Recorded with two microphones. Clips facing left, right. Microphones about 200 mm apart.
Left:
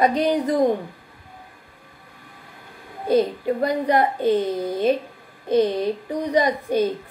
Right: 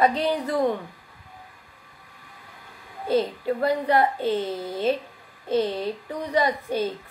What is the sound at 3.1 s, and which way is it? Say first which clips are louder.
A woman's voice: left 4 dB; 15° left (ahead or behind).